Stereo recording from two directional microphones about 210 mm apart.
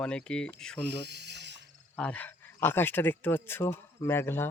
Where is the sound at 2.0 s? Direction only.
5° left (ahead or behind).